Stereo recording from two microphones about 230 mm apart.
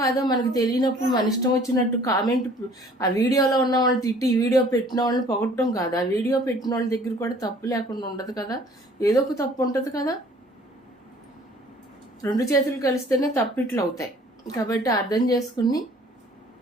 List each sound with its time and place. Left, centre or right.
0.0 s a woman's voice: centre
12.2 s speech: centre